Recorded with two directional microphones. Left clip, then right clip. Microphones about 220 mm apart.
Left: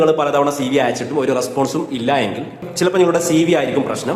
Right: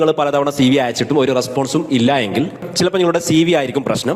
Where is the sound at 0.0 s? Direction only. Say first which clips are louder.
Even; 40° right (ahead or behind).